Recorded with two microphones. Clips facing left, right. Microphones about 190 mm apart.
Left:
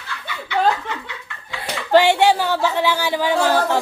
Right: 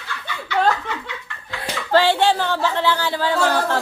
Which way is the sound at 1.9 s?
15° left (ahead or behind).